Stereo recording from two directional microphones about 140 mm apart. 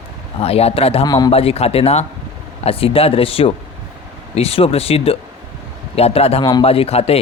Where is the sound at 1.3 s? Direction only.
45° left (ahead or behind).